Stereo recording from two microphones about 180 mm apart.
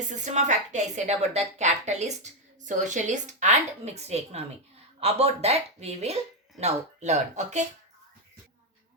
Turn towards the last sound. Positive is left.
turn(degrees=-40)  # may be behind; listen again after turning